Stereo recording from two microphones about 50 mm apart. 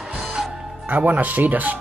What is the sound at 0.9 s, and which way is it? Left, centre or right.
Speech, right.